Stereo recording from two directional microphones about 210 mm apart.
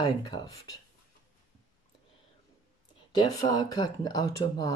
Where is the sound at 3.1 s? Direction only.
20° left (ahead or behind).